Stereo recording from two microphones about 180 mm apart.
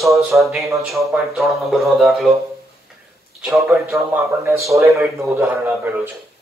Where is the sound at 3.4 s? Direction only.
Centre (ahead or behind).